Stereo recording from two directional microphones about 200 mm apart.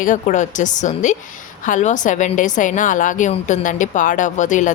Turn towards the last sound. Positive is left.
turn(degrees=40)  # may be behind; listen again after turning